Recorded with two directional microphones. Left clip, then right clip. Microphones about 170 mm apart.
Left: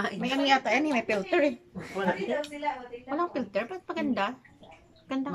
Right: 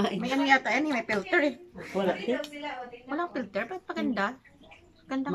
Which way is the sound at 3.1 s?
10° left (ahead or behind).